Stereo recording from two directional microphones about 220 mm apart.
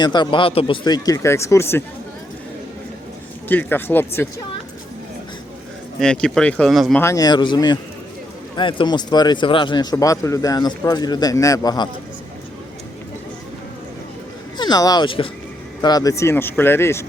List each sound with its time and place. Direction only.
0.0 s speech: 20° left (ahead or behind)
3.5 s speech: 10° left (ahead or behind)
6.0 s speech: 5° left (ahead or behind)
7.0 s speech: 15° left (ahead or behind)
14.6 s speech: 15° left (ahead or behind)